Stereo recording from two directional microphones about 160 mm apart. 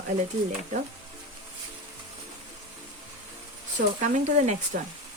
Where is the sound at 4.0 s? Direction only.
45° right (ahead or behind).